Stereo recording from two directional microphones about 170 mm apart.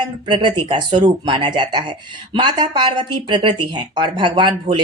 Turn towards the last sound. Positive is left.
turn(degrees=-30)  # may be behind; listen again after turning